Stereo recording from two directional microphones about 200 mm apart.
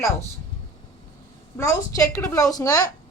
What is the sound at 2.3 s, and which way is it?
Speech, 15° left (ahead or behind).